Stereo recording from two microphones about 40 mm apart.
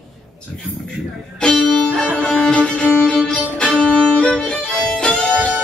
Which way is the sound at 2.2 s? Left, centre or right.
Centre.